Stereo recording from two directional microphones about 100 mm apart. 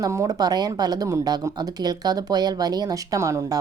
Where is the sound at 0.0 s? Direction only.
35° right (ahead or behind).